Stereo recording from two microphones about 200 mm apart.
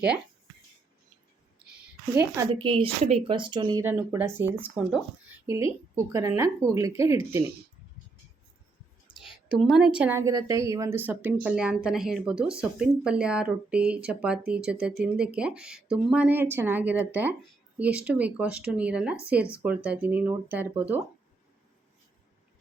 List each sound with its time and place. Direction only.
1.7 s a sound: 10° right (ahead or behind)
2.5 s a woman's voice: 25° right (ahead or behind)
3.8 s a woman's voice: 10° right (ahead or behind)
9.5 s a woman's voice: 5° right (ahead or behind)